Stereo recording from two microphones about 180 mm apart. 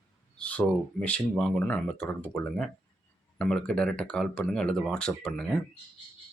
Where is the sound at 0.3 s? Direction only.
5° left (ahead or behind).